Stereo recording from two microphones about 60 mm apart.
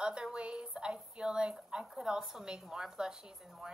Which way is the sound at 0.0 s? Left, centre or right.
Centre.